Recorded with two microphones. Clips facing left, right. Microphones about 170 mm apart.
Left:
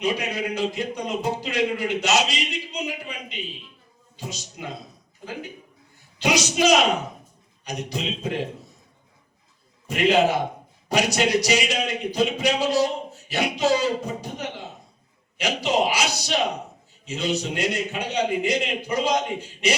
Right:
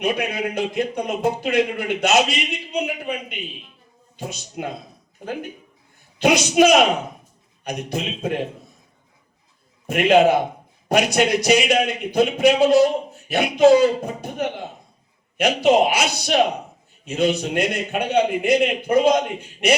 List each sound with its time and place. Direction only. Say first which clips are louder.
0.0 s a man's voice: right 3 dB; 55° right (ahead or behind)
9.8 s a man's voice: right 4 dB; 55° right (ahead or behind)